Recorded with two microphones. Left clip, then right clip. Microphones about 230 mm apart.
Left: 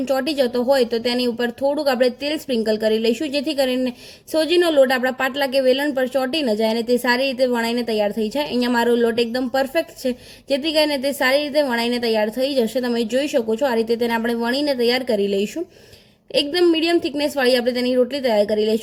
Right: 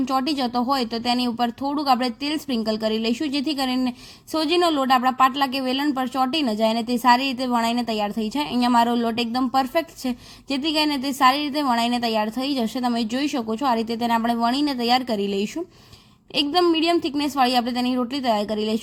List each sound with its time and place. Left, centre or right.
0.1 s a woman's voice: centre